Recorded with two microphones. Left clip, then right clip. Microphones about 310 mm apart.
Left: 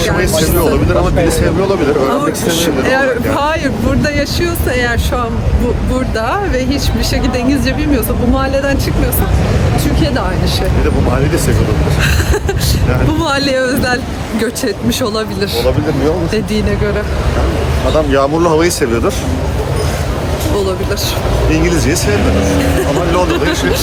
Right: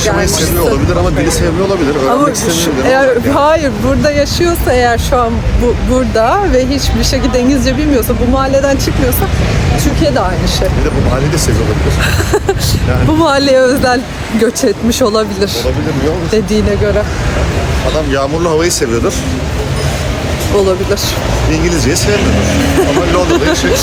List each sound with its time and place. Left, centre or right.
2.5 s speech: centre
13.2 s speech: centre
17.9 s speech: centre
21.5 s speech: centre